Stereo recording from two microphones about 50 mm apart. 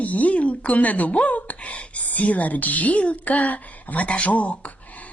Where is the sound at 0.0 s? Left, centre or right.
Left.